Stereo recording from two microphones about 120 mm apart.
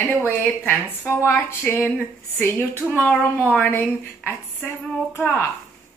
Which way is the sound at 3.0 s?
10° left (ahead or behind).